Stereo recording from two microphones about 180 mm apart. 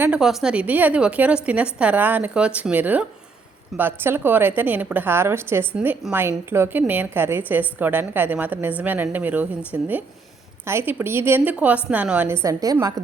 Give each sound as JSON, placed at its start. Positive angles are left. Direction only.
{"t": 0.0, "sound": "a woman's voice", "side_deg": -5}